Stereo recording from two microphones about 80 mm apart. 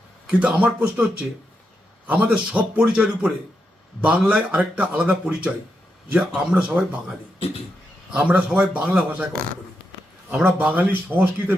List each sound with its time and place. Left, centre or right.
0.3 s speech: centre
2.0 s speech: centre
8.1 s speech: centre
10.4 s speech: centre